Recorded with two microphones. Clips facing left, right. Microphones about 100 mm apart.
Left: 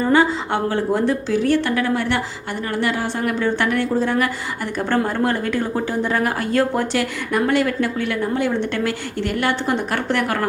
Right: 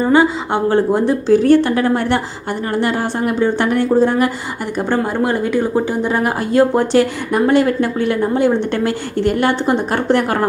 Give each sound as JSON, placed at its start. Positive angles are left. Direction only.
{"t": 0.0, "sound": "speech", "side_deg": -20}
{"t": 1.3, "sound": "a woman's voice", "side_deg": -35}